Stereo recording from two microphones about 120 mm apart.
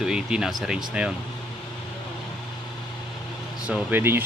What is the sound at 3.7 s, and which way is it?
Speech, 15° right (ahead or behind).